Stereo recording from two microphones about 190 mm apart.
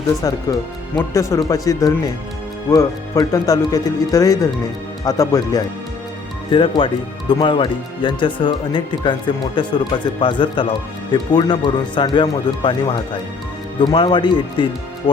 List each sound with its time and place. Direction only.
0.9 s speech: 15° left (ahead or behind)